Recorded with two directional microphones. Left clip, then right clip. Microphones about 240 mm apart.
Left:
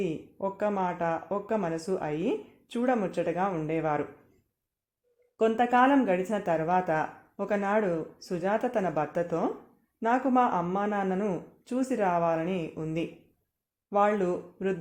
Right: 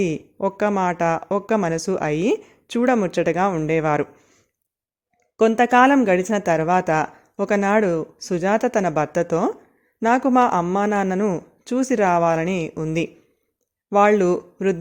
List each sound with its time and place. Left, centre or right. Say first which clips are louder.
0.0 s speech: right 9 dB; right
5.4 s speech: right 9 dB; right